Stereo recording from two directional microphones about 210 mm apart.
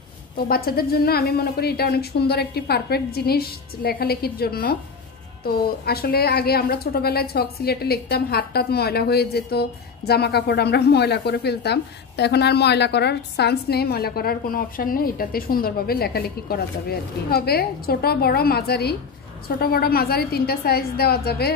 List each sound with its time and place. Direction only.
0.5 s a woman's voice: 45° left (ahead or behind)